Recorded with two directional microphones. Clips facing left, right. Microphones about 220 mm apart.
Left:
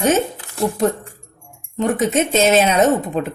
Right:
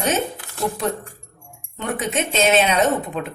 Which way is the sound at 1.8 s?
40° left (ahead or behind).